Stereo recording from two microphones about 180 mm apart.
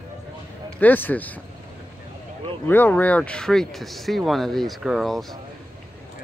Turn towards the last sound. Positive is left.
turn(degrees=0)  # may be behind; listen again after turning